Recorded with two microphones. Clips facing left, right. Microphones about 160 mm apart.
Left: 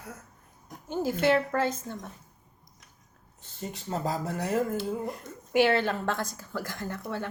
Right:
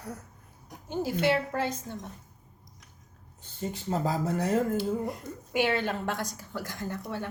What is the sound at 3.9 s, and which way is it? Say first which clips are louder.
Speech: right 2 dB; 30° right (ahead or behind).